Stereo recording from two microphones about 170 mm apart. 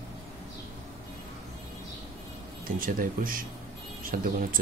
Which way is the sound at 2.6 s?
55° right (ahead or behind).